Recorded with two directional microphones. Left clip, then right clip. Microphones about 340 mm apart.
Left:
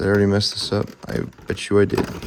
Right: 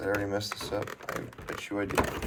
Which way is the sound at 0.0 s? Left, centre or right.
Left.